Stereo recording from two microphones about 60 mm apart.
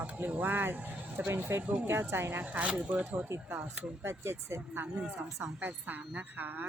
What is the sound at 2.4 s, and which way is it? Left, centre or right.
Speech, right.